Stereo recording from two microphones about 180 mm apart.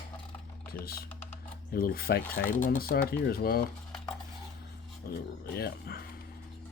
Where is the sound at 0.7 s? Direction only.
55° left (ahead or behind).